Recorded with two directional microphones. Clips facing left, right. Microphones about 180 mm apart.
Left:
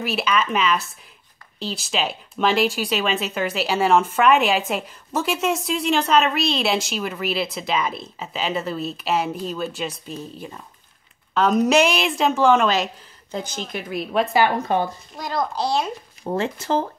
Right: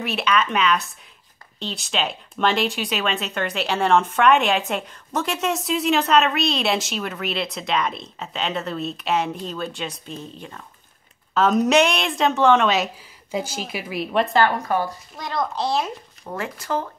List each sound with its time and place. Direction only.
0.0 s speech: centre (ahead or behind)
14.3 s speech: 20° left (ahead or behind)
15.1 s speech: centre (ahead or behind)
16.3 s speech: 25° left (ahead or behind)